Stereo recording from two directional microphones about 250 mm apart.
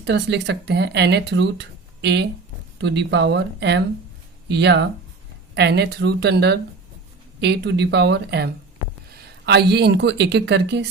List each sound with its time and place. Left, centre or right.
0.0 s speech: right
9.5 s speech: right